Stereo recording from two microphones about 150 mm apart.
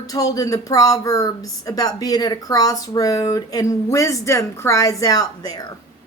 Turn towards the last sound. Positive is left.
turn(degrees=25)  # may be behind; listen again after turning